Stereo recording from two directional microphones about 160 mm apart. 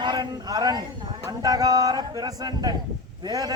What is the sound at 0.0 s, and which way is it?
A man's voice, 25° right (ahead or behind).